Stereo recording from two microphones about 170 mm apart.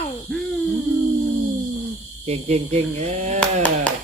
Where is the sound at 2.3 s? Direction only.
40° right (ahead or behind).